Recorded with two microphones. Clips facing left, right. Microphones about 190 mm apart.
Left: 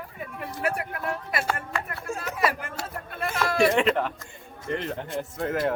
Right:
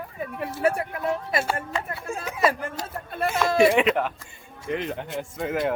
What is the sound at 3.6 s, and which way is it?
Speech, 5° right (ahead or behind).